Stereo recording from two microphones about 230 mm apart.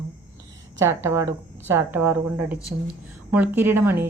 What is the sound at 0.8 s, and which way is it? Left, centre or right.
A woman's voice, centre.